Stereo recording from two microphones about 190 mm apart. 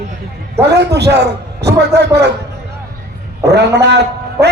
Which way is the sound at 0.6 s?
60° right (ahead or behind).